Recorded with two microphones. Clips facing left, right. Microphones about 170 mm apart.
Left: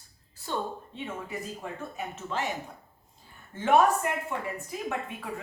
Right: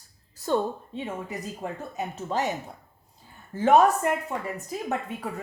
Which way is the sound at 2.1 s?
40° right (ahead or behind).